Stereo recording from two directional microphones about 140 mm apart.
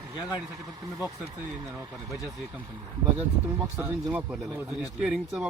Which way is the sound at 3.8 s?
10° right (ahead or behind).